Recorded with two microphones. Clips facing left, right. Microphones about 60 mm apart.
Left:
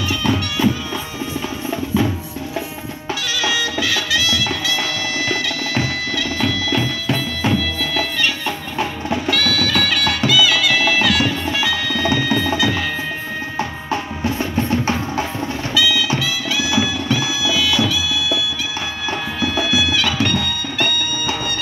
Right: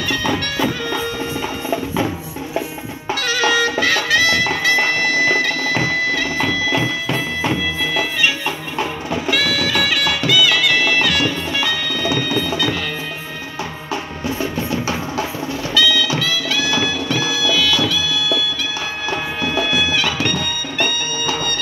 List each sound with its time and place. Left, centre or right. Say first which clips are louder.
3.2 s bagpipes: right 5 dB; right
7.5 s music: even; centre
13.6 s music: left 2 dB; left
15.7 s music: right 2 dB; centre
16.2 s bagpipes: right 1 dB; centre
19.4 s music: left 1 dB; centre